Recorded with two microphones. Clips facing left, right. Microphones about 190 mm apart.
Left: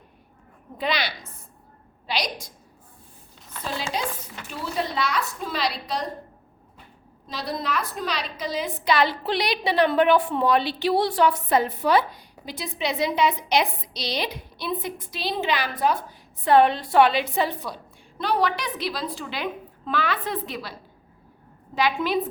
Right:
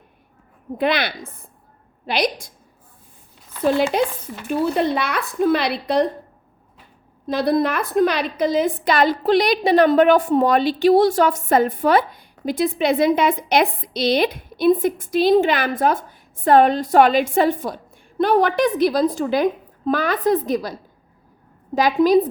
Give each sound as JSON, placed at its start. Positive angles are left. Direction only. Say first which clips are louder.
{"t": 0.8, "sound": "a woman's voice", "louder": "right 7 dB", "side_deg": -55}
{"t": 3.6, "sound": "a woman's voice", "louder": "right 12 dB", "side_deg": -55}
{"t": 7.3, "sound": "a woman's voice", "louder": "right 11 dB", "side_deg": -55}
{"t": 21.8, "sound": "a woman's voice", "louder": "right 9 dB", "side_deg": -40}